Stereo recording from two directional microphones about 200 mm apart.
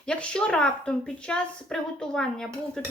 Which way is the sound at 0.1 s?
5° left (ahead or behind).